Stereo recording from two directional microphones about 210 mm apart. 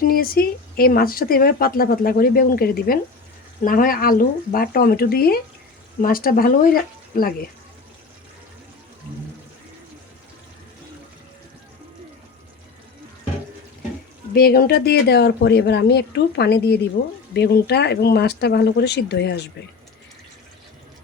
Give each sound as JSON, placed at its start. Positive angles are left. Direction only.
{"t": 0.0, "sound": "speech", "side_deg": 45}
{"t": 14.3, "sound": "speech", "side_deg": 45}